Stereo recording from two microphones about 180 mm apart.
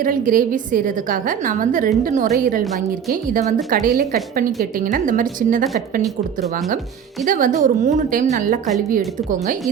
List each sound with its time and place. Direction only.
0.0 s a woman's voice: 50° right (ahead or behind)
7.3 s a woman's voice: 45° right (ahead or behind)